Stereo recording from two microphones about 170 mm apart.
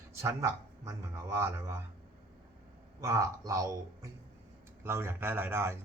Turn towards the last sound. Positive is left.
turn(degrees=-15)  # may be behind; listen again after turning